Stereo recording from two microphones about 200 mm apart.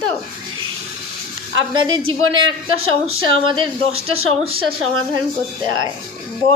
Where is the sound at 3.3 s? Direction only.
25° right (ahead or behind).